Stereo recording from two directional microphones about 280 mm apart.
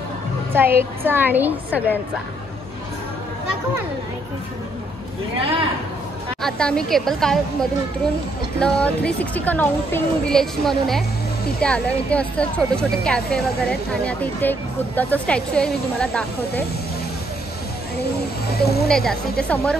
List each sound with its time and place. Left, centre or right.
0.5 s a woman's voice: centre
6.4 s a woman's voice: centre
8.5 s a woman's voice: centre
18.5 s speech: left
18.9 s a woman's voice: centre